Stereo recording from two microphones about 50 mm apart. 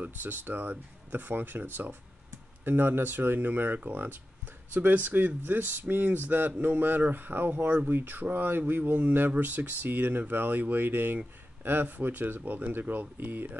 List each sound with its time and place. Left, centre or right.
0.0 s speech: right